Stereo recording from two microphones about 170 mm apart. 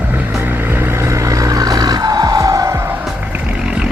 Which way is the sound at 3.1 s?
10° right (ahead or behind).